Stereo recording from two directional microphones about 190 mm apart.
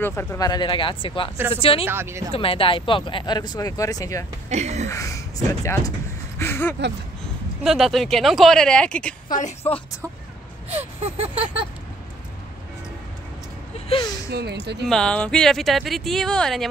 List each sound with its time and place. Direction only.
0.0 s speech: 10° left (ahead or behind); by 1.9 s 30° left (ahead or behind)
1.9 s speech: 15° right (ahead or behind)
2.3 s speech: 30° left (ahead or behind)
4.5 s gasp: 35° right (ahead or behind)
4.8 s speech: 15° left (ahead or behind)
7.6 s speech: centre (ahead or behind)
10.7 s gasp: 35° right (ahead or behind)
13.7 s a sound: 30° left (ahead or behind)
14.3 s speech: 60° right (ahead or behind)
14.9 s speech: 5° left (ahead or behind)